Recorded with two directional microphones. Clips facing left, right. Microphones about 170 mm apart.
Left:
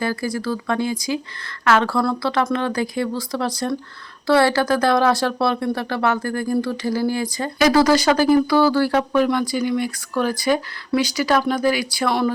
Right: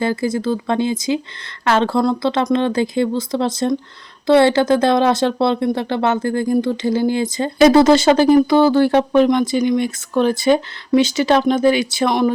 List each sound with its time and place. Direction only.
0.0 s speech: 25° right (ahead or behind)